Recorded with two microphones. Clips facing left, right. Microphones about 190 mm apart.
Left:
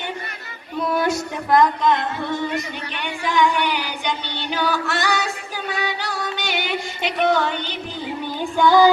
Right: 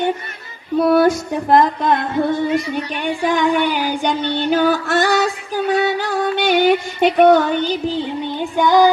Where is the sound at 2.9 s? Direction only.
40° right (ahead or behind).